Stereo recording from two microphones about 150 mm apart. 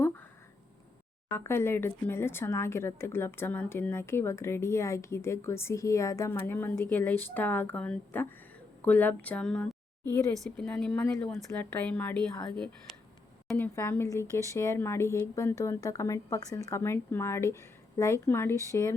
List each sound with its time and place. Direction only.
1.3 s speech: 15° left (ahead or behind)
11.3 s a woman's voice: centre (ahead or behind)
13.6 s speech: 15° left (ahead or behind)